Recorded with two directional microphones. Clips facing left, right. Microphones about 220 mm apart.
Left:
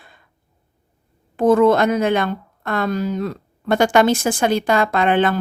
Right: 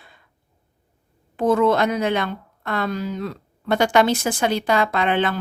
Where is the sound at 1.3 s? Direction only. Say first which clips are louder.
Left 4 dB; 50° left (ahead or behind).